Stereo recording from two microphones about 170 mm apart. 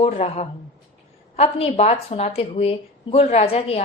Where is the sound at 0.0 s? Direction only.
40° left (ahead or behind).